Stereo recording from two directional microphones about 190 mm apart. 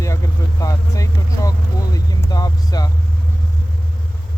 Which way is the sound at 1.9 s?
20° left (ahead or behind).